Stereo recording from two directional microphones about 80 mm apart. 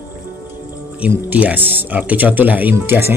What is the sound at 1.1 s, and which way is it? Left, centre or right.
A man's voice, right.